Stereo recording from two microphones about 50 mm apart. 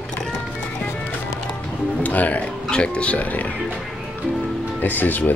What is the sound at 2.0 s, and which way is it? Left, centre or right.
Speech, left.